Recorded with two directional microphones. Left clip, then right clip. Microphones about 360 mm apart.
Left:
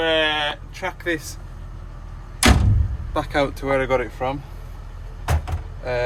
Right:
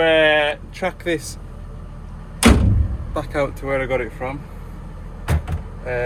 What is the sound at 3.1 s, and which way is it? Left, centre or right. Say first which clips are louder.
Speech: left 1 dB; centre.